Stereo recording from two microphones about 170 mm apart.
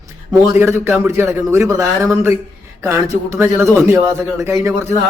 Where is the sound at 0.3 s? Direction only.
15° right (ahead or behind).